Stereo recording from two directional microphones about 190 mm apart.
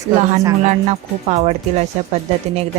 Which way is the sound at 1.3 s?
35° right (ahead or behind).